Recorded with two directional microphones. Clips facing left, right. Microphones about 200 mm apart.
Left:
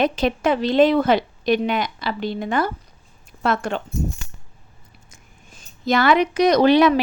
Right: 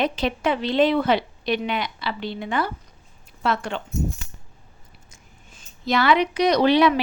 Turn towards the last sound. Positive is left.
turn(degrees=45)  # may be behind; listen again after turning